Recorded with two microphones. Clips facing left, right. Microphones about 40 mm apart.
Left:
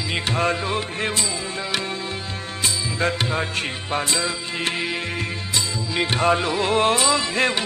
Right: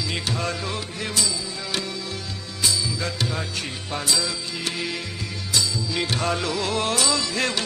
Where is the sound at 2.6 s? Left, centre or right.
Left.